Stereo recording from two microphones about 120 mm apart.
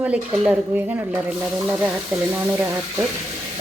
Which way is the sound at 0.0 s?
10° right (ahead or behind).